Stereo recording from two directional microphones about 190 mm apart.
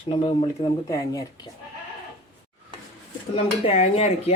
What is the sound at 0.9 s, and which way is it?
Speech, 20° left (ahead or behind).